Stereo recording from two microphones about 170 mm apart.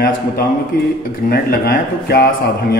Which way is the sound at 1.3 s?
65° left (ahead or behind).